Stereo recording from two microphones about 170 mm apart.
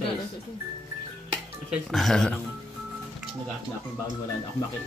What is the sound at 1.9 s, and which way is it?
Speech, centre (ahead or behind).